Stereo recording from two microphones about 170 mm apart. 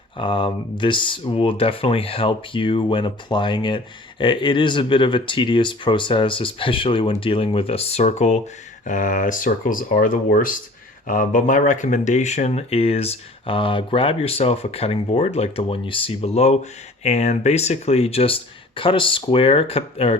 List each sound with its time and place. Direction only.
0.2 s speech: 30° left (ahead or behind)